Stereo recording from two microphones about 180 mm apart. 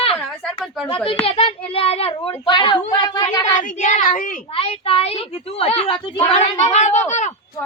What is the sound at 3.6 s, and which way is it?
Speech, 45° left (ahead or behind).